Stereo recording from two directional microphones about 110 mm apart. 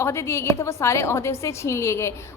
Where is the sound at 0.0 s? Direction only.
25° left (ahead or behind).